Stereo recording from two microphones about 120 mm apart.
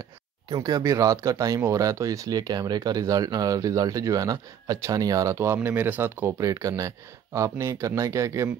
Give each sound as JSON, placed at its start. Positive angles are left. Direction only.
{"t": 0.5, "sound": "speech", "side_deg": -35}